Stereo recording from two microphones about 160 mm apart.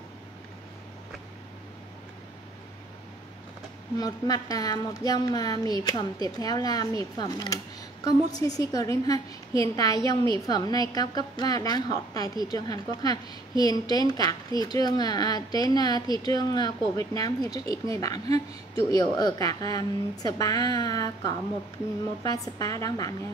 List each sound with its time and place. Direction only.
4.0 s speech: 25° left (ahead or behind)